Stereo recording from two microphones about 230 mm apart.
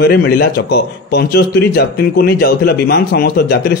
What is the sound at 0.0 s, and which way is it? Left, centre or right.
A man's voice, left.